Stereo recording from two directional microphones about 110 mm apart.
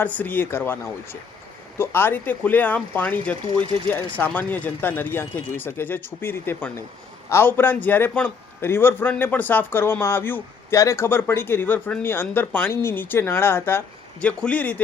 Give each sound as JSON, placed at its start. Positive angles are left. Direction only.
{"t": 0.0, "sound": "speech", "side_deg": 15}
{"t": 1.8, "sound": "speech", "side_deg": 20}
{"t": 3.4, "sound": "speech", "side_deg": -50}
{"t": 3.8, "sound": "a man's voice", "side_deg": 15}